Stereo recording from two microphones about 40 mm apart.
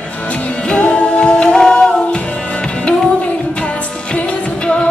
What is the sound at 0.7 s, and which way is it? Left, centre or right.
Music, left.